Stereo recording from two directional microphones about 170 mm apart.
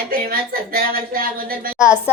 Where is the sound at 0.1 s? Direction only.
60° right (ahead or behind).